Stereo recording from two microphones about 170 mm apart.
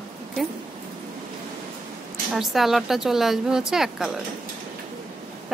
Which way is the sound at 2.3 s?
Centre (ahead or behind).